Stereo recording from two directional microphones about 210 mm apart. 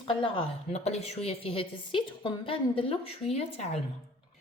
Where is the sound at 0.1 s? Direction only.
25° left (ahead or behind).